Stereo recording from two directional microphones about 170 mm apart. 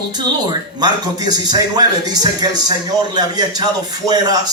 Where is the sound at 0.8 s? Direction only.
25° right (ahead or behind).